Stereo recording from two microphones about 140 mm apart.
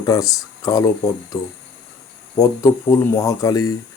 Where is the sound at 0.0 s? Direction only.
25° left (ahead or behind).